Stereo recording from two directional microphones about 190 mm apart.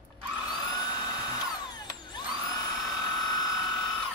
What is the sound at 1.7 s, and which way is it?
Drill, 20° left (ahead or behind).